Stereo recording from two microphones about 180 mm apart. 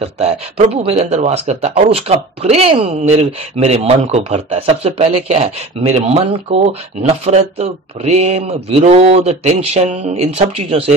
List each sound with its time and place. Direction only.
0.2 s speech: 35° right (ahead or behind)